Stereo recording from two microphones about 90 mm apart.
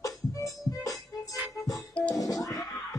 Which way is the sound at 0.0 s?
40° left (ahead or behind).